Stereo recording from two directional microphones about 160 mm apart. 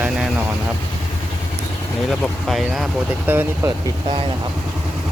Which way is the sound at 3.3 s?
10° right (ahead or behind).